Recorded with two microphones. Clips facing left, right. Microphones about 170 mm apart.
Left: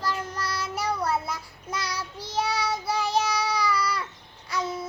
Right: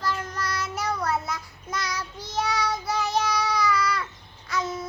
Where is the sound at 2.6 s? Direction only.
10° left (ahead or behind).